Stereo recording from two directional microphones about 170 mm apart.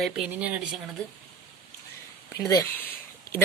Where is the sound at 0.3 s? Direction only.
10° right (ahead or behind).